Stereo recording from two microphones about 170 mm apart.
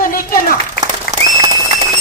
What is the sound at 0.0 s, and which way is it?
Clapping, 55° left (ahead or behind).